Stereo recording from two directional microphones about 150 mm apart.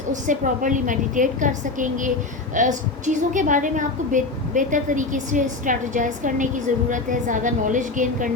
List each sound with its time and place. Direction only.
0.1 s a woman's voice: 60° right (ahead or behind)